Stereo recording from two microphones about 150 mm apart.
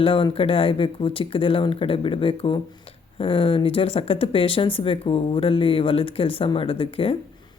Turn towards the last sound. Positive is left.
turn(degrees=40)  # may be behind; listen again after turning